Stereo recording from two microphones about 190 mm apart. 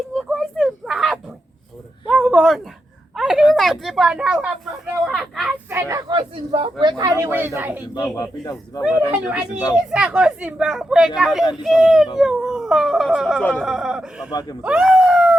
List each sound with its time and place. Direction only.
0.1 s a sound: centre (ahead or behind)
3.5 s speech: centre (ahead or behind)
5.7 s speech: 15° right (ahead or behind)
7.9 s speech: 20° left (ahead or behind)
9.7 s speech: 5° right (ahead or behind)
14.3 s speech: 20° left (ahead or behind)
14.6 s a sound: 5° right (ahead or behind)